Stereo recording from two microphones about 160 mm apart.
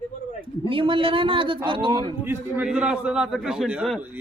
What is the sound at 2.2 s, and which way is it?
A man's voice, 10° right (ahead or behind).